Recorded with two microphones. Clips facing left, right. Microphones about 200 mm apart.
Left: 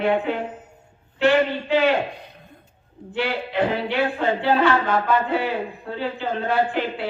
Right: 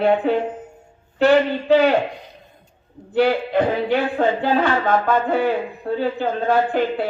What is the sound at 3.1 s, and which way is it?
Speech, 45° right (ahead or behind).